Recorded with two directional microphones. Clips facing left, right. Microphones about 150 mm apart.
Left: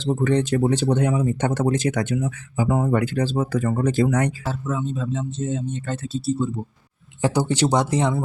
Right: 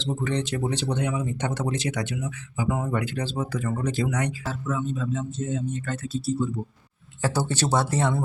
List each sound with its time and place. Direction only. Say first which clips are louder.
0.0 s speech: left 7 dB; 50° left (ahead or behind)
4.7 s speech: left 1 dB; 30° left (ahead or behind)
7.2 s speech: left 5 dB; 15° left (ahead or behind)